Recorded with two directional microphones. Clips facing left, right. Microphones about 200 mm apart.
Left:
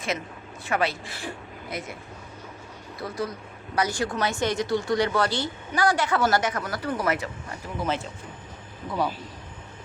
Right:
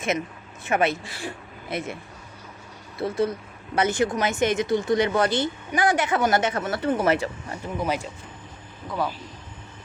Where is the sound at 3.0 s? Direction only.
25° right (ahead or behind).